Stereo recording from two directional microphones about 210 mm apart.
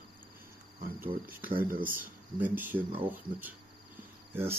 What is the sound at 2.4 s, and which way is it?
Speech, 10° right (ahead or behind).